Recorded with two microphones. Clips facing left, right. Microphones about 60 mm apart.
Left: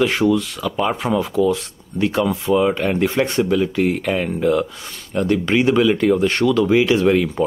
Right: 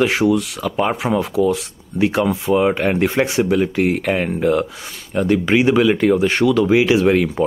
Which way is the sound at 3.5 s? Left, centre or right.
Right.